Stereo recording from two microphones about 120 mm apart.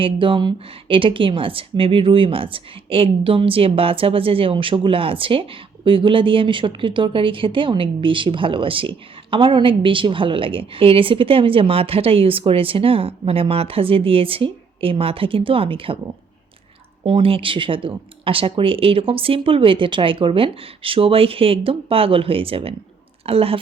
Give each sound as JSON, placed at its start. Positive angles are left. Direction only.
{"t": 0.0, "sound": "a woman's voice", "side_deg": -45}
{"t": 17.0, "sound": "a woman's voice", "side_deg": -45}